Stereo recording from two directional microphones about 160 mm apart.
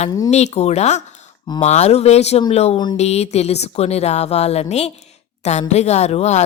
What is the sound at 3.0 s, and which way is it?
Speech, 45° left (ahead or behind).